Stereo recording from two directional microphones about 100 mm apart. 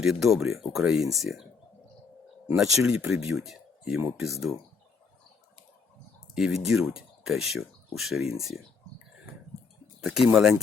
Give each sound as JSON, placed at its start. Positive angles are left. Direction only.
{"t": 0.0, "sound": "speech", "side_deg": -5}
{"t": 2.6, "sound": "speech", "side_deg": -5}
{"t": 6.3, "sound": "speech", "side_deg": -5}
{"t": 10.0, "sound": "speech", "side_deg": -5}